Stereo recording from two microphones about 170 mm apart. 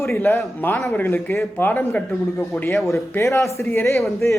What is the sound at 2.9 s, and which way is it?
A man's voice, 15° left (ahead or behind).